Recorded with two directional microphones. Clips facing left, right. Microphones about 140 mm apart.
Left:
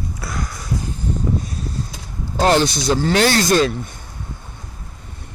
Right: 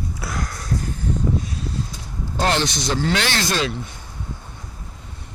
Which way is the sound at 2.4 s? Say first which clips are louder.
Left 6 dB; 40° left (ahead or behind).